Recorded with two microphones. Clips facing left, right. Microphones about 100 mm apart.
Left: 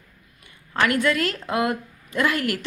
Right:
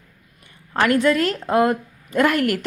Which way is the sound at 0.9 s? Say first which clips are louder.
Right 4 dB; 40° right (ahead or behind).